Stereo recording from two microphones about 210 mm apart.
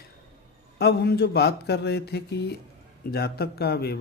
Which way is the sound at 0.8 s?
50° left (ahead or behind).